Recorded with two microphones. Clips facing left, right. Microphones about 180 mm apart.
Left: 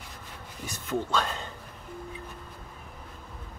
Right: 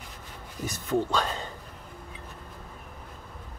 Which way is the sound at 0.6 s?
45° right (ahead or behind).